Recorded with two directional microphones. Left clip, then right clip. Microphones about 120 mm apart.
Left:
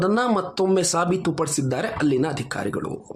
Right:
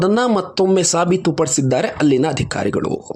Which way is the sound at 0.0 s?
45° right (ahead or behind).